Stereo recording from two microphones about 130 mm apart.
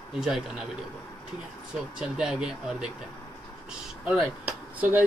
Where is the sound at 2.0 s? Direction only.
5° right (ahead or behind).